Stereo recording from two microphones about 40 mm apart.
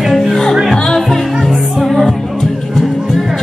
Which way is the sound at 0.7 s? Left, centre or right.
Centre.